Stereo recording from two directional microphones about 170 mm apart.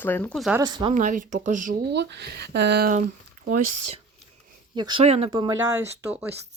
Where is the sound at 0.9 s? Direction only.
50° right (ahead or behind).